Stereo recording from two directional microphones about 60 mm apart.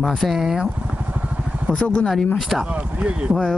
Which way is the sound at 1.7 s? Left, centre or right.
Centre.